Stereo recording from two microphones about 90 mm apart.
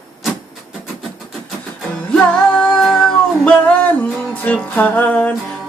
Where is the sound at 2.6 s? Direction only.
10° left (ahead or behind).